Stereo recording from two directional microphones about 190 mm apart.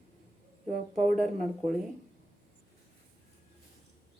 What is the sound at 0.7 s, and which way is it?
Speech, 40° right (ahead or behind).